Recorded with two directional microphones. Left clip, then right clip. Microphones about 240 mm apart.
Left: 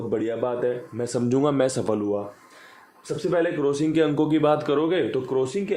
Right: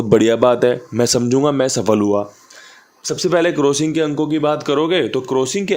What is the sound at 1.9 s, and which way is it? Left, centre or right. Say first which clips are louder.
A man's voice: right 9 dB; right.